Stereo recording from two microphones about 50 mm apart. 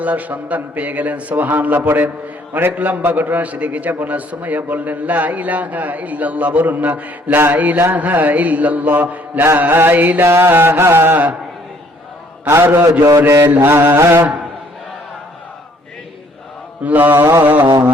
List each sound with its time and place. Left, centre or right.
0.0 s a man's voice: right
2.5 s a man's voice: right
2.7 s a man's voice: right
9.6 s a man's voice: right
10.2 s mantra: right
12.5 s a man's voice: right
13.5 s mantra: right
16.8 s a man's voice: right
17.2 s a man's voice: right
17.4 s a man's voice: right